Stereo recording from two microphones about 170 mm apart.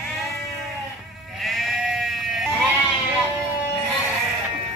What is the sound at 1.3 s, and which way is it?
Sheep, centre (ahead or behind).